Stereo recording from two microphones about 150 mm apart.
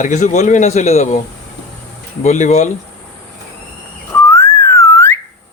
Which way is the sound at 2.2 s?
50° left (ahead or behind).